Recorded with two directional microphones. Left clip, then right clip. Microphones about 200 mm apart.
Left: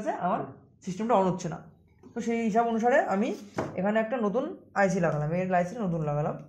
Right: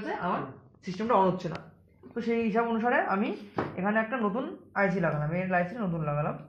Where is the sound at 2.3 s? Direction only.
40° left (ahead or behind).